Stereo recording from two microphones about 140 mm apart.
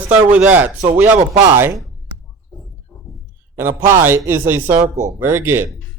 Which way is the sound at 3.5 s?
15° right (ahead or behind).